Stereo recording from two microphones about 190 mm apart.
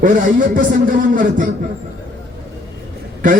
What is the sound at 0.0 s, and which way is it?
A man's voice, 45° right (ahead or behind).